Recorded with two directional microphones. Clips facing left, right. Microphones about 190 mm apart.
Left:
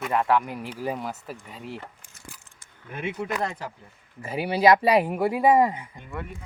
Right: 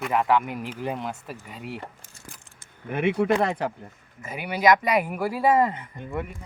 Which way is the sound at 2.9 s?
65° right (ahead or behind).